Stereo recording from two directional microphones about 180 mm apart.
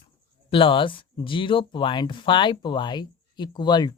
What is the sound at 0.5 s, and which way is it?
Speech, 30° left (ahead or behind).